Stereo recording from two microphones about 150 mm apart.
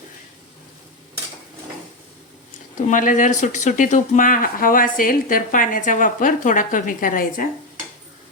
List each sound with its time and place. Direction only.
2.7 s speech: 60° left (ahead or behind)